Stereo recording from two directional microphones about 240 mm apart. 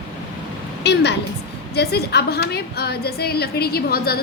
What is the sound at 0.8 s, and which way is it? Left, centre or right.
A woman's voice, left.